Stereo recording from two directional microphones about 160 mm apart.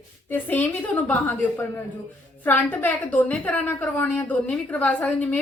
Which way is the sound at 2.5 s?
10° left (ahead or behind).